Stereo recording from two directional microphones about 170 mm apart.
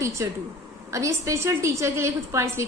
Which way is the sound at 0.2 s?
20° right (ahead or behind).